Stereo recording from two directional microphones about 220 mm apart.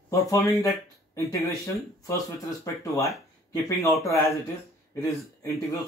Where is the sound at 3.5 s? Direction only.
15° left (ahead or behind).